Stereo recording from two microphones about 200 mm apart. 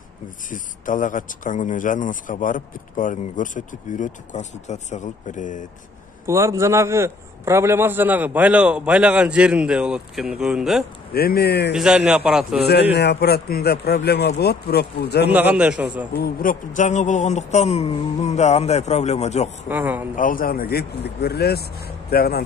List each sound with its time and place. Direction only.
0.5 s speech: 40° left (ahead or behind)
6.2 s a man's voice: 15° right (ahead or behind)
11.1 s speech: 50° left (ahead or behind)
11.7 s a man's voice: 5° right (ahead or behind)
12.9 s speech: 55° left (ahead or behind)
15.2 s a man's voice: 10° right (ahead or behind)
16.1 s speech: 50° left (ahead or behind)
19.7 s a man's voice: 10° right (ahead or behind)
20.2 s speech: 45° left (ahead or behind)